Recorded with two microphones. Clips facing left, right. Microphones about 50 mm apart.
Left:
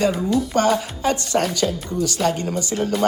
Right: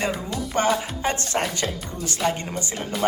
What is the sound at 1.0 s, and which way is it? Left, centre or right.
Speech, right.